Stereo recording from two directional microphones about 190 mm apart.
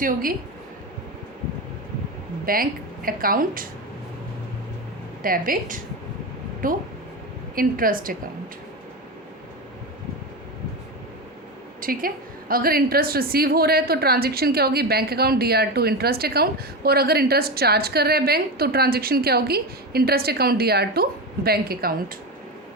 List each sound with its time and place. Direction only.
0.0 s speech: 45° right (ahead or behind)
2.5 s speech: 50° right (ahead or behind)
5.2 s speech: 50° right (ahead or behind)
11.8 s a woman's voice: 50° right (ahead or behind)